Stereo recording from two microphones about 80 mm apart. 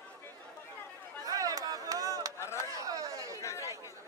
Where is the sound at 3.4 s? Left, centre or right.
Left.